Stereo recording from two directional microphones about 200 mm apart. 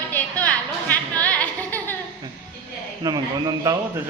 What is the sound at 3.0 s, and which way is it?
Speech, 20° right (ahead or behind).